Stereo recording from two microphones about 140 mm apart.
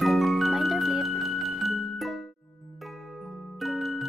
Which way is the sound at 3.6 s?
Centre (ahead or behind).